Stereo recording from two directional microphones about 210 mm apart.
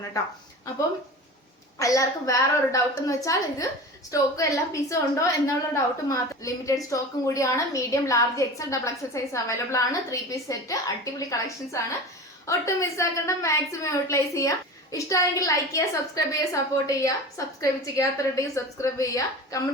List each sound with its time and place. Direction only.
1.8 s a woman's voice: 15° left (ahead or behind)